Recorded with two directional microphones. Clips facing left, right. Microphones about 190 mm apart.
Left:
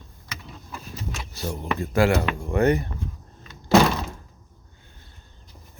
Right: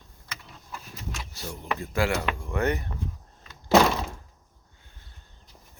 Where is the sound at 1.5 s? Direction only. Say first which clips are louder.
Left 5 dB; 40° left (ahead or behind).